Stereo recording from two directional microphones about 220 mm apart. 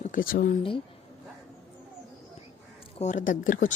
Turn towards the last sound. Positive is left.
turn(degrees=40)  # may be behind; listen again after turning